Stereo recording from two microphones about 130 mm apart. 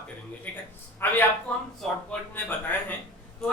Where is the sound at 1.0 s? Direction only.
20° left (ahead or behind).